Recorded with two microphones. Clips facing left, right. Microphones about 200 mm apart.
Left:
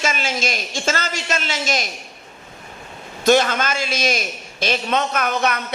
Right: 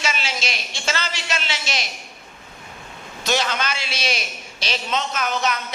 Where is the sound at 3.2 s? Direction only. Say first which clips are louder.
Left 7 dB; 50° left (ahead or behind).